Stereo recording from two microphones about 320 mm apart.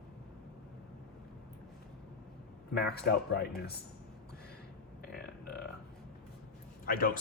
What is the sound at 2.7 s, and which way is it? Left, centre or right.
Speech, left.